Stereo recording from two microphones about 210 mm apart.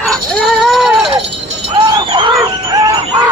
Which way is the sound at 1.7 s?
20° right (ahead or behind).